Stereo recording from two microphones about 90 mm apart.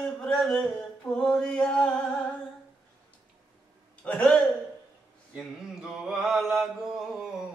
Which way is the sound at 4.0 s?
10° left (ahead or behind).